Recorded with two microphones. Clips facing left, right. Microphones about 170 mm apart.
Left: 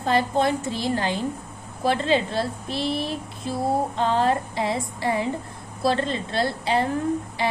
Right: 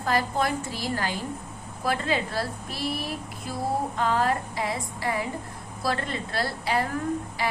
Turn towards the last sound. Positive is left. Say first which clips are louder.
# left 4 dB
turn(degrees=25)  # may be behind; listen again after turning